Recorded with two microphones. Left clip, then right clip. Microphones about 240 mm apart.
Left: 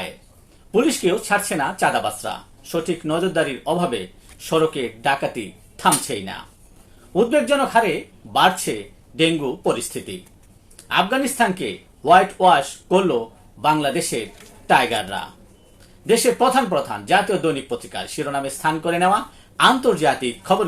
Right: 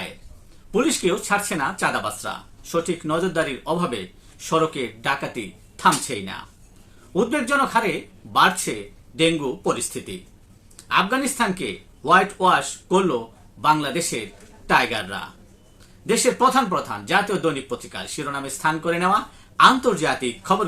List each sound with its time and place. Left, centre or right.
0.7 s speech: centre